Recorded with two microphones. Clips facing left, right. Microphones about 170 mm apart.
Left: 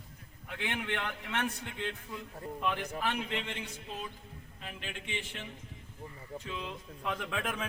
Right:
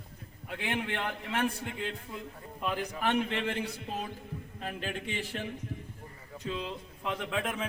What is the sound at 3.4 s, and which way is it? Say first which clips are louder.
Music: right 8 dB; 55° right (ahead or behind).